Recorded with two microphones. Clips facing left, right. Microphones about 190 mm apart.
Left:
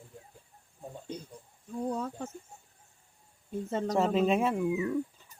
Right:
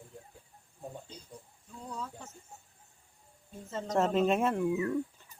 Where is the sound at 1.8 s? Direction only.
55° left (ahead or behind).